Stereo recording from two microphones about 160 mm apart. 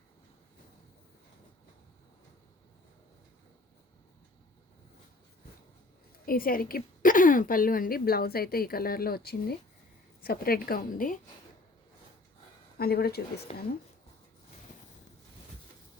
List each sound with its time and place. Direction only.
6.2 s a woman's voice: 65° left (ahead or behind); by 9.6 s 80° left
10.2 s a woman's voice: 70° left (ahead or behind)
12.7 s a woman's voice: 75° left (ahead or behind)
13.5 s speech: 40° left (ahead or behind)